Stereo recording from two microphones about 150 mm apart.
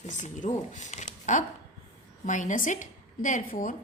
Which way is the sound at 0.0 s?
55° left (ahead or behind).